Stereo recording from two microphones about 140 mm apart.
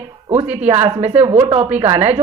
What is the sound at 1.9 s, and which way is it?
Speech, 55° right (ahead or behind).